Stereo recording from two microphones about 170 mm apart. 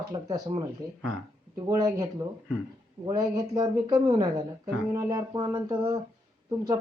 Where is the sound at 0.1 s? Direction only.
20° right (ahead or behind).